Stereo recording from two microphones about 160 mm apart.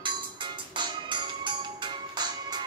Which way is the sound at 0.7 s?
30° right (ahead or behind).